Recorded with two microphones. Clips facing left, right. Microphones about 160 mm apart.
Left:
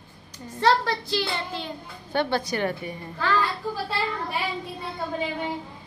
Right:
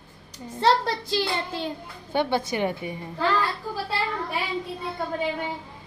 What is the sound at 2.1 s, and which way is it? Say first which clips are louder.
Speech: right 1 dB; 15° right (ahead or behind).